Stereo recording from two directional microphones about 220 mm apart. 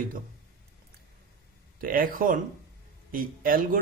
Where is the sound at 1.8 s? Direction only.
40° right (ahead or behind).